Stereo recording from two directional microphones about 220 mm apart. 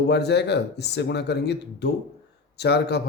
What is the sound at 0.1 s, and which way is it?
Speech, 50° left (ahead or behind).